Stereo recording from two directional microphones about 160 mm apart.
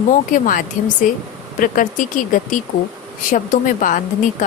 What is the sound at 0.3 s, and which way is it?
Speech, 55° left (ahead or behind).